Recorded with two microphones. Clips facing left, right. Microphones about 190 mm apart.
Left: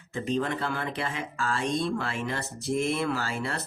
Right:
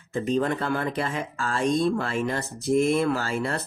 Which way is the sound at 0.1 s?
45° right (ahead or behind).